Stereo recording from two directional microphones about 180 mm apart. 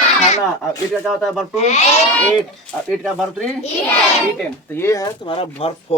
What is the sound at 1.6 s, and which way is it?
Speech, 35° left (ahead or behind).